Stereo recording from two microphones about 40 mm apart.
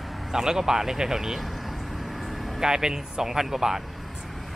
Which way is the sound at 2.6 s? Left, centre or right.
Centre.